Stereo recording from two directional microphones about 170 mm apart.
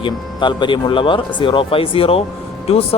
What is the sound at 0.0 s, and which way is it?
Speech, 25° left (ahead or behind).